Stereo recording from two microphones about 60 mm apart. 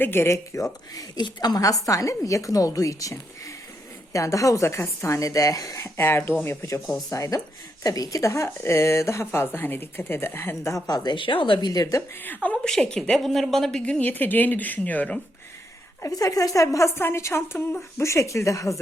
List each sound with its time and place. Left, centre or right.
0.0 s a woman's voice: left
0.5 s a woman's voice: left
7.1 s a woman's voice: left
9.2 s a woman's voice: left
11.7 s a woman's voice: left
12.2 s speech: left
12.6 s a woman's voice: centre
14.0 s speech: left
16.1 s a woman's voice: left
16.9 s a woman's voice: left